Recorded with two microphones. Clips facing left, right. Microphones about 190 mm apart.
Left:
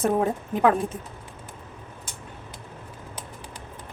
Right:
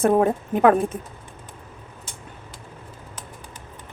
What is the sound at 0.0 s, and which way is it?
Speech, 55° right (ahead or behind).